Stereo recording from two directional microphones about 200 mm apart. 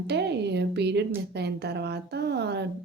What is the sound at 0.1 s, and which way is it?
A woman's voice, 55° right (ahead or behind).